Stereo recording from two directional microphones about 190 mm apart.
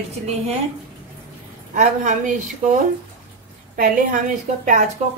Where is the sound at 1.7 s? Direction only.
40° right (ahead or behind).